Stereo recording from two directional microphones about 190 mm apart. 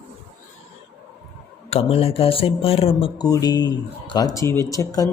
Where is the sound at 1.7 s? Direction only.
30° left (ahead or behind).